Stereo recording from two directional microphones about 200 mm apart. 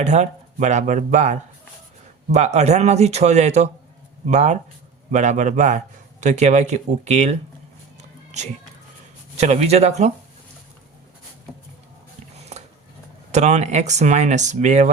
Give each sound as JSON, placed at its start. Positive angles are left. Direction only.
{"t": 0.0, "sound": "a man's voice", "side_deg": -35}
{"t": 9.4, "sound": "a man's voice", "side_deg": -35}
{"t": 12.5, "sound": "a sound", "side_deg": -35}
{"t": 13.3, "sound": "a man's voice", "side_deg": -35}